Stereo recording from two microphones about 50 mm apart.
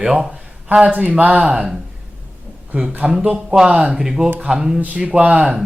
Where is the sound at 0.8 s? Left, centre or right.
Right.